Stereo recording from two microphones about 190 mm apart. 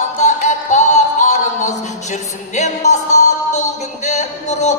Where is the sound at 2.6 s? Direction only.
40° left (ahead or behind).